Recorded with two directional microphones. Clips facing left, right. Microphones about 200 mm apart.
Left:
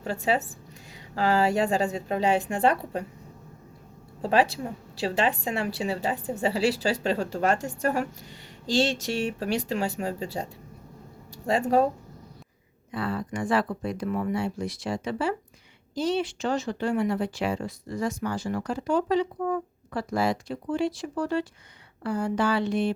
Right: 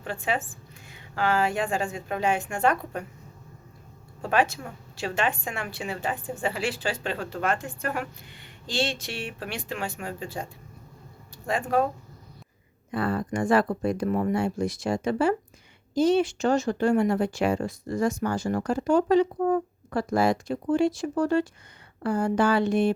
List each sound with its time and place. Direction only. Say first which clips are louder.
0.0 s a woman's voice: left 3 dB; 40° left (ahead or behind)
4.2 s a woman's voice: left 2 dB; 35° left (ahead or behind)
11.4 s a woman's voice: left 3 dB; 35° left (ahead or behind)
12.9 s speech: right 3 dB; 50° right (ahead or behind)